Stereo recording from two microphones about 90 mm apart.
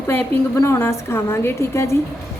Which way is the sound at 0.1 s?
20° left (ahead or behind).